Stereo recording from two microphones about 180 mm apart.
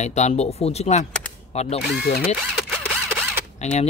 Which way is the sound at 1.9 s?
65° left (ahead or behind).